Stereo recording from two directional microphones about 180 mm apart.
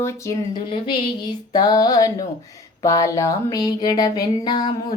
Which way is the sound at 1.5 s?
20° left (ahead or behind).